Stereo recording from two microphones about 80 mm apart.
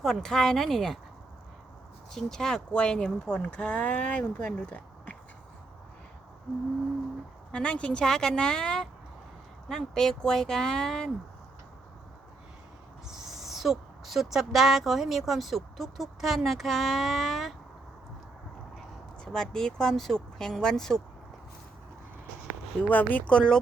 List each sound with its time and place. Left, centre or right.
0.0 s speech: centre
2.1 s speech: centre
7.5 s speech: centre
13.1 s speech: centre
19.2 s speech: centre
22.8 s speech: left